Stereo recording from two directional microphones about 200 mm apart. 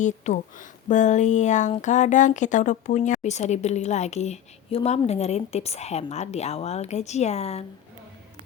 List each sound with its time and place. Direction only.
0.0 s speech: 40° left (ahead or behind)